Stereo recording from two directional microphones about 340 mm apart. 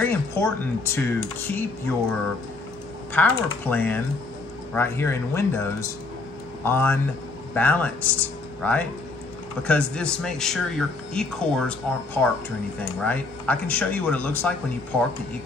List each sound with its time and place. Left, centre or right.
0.0 s speech: centre
3.1 s speech: centre